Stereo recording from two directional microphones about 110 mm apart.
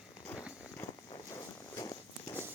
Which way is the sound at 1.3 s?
30° left (ahead or behind).